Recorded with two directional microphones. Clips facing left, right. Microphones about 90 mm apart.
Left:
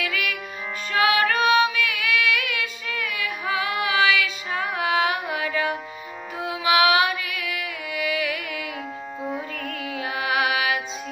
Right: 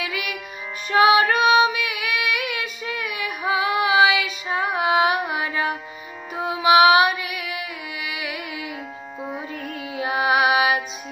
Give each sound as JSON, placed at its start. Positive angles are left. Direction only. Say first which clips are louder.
{"t": 0.0, "sound": "music", "louder": "left 1 dB", "side_deg": -20}
{"t": 1.4, "sound": "child singing", "louder": "right 2 dB", "side_deg": -20}
{"t": 2.6, "sound": "female singing", "louder": "right 1 dB", "side_deg": -20}
{"t": 6.3, "sound": "music", "louder": "right 5 dB", "side_deg": -25}